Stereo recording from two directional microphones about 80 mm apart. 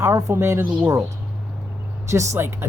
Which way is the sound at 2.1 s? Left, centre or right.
Right.